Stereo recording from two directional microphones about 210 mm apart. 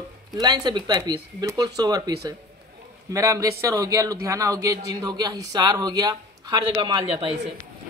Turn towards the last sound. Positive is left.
turn(degrees=-20)  # may be behind; listen again after turning